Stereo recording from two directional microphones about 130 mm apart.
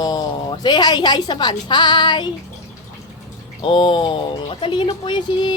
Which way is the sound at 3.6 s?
40° left (ahead or behind).